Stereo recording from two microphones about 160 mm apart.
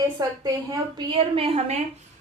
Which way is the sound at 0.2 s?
25° right (ahead or behind).